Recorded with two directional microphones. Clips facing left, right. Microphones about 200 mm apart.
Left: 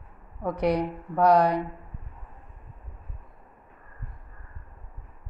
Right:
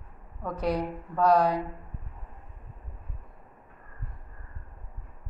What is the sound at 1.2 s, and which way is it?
Speech, 70° left (ahead or behind).